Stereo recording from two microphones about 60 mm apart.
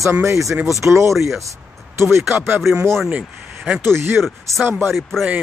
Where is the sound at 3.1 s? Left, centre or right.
Right.